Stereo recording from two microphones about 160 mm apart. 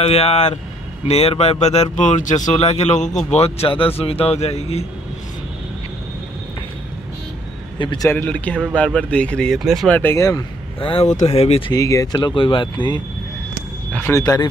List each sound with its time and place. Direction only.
0.0 s speech: 40° left (ahead or behind)
7.8 s speech: 30° left (ahead or behind)
8.1 s speech: 10° left (ahead or behind)
9.9 s speech: 15° left (ahead or behind)
10.8 s speech: 35° left (ahead or behind)
11.7 s speech: 20° left (ahead or behind)
13.9 s speech: 15° left (ahead or behind)
14.2 s speech: 25° left (ahead or behind)